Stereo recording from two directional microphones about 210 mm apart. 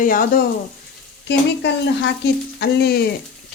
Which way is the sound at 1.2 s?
55° left (ahead or behind).